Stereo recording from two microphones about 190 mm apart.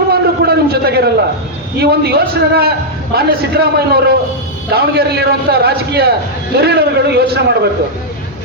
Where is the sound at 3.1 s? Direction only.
55° right (ahead or behind).